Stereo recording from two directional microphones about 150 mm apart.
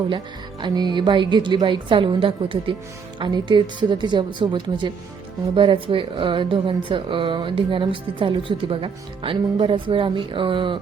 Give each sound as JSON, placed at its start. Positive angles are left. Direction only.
{"t": 0.6, "sound": "speech", "side_deg": -30}